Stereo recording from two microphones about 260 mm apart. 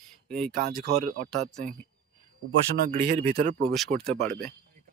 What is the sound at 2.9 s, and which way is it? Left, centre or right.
Speech, right.